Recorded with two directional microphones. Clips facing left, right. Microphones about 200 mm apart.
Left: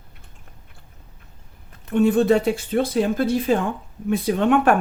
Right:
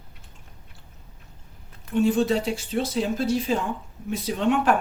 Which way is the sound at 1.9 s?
55° left (ahead or behind).